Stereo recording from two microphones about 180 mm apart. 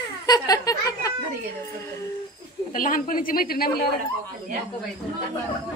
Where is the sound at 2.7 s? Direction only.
50° left (ahead or behind).